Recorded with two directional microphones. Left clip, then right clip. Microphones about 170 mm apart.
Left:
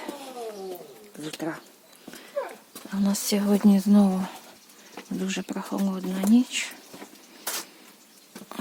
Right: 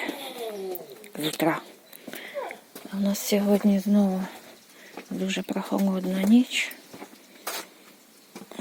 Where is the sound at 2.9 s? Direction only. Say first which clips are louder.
Right 1 dB; 10° left (ahead or behind).